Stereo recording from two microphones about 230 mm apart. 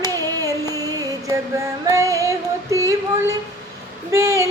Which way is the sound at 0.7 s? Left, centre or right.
Centre.